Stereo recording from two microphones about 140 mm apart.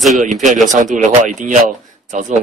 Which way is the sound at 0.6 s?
65° right (ahead or behind).